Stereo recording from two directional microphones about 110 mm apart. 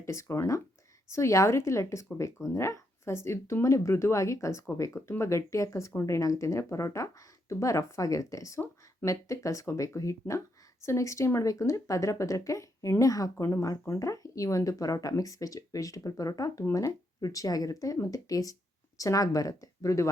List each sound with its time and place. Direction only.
0.0 s speech: 25° left (ahead or behind)